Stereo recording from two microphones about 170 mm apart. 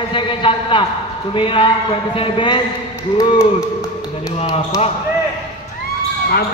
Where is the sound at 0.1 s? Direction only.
30° left (ahead or behind).